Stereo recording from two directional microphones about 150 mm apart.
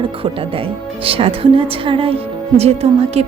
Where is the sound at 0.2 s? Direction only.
35° right (ahead or behind).